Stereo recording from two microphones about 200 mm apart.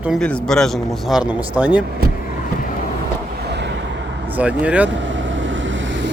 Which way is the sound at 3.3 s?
55° right (ahead or behind).